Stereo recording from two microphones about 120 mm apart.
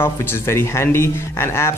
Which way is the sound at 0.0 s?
20° left (ahead or behind).